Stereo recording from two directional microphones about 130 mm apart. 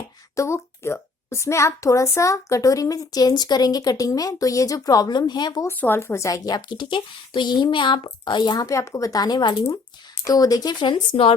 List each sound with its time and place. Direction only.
0.3 s a woman's voice: 20° left (ahead or behind)
5.7 s a woman's voice: 15° left (ahead or behind); by 11.3 s 40° left (ahead or behind)